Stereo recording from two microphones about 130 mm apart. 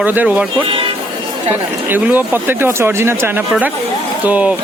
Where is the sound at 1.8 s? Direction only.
15° right (ahead or behind).